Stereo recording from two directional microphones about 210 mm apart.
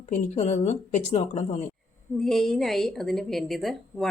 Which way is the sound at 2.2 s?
Centre (ahead or behind).